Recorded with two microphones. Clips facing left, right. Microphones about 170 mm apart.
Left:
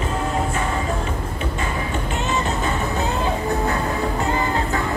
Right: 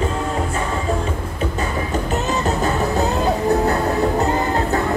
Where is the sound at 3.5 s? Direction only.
35° right (ahead or behind).